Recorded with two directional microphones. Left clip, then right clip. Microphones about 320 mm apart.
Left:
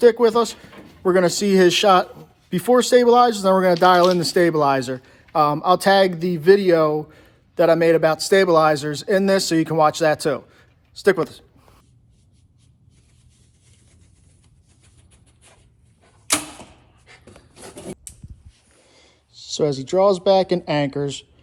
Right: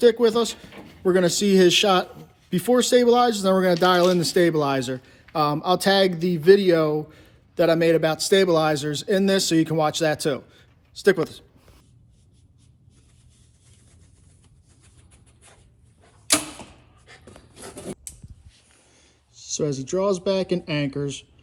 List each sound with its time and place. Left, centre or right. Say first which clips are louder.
0.0 s speech: left 3 dB; centre
16.3 s a sound: even; centre
17.2 s wood: even; centre
19.3 s speech: left 5 dB; centre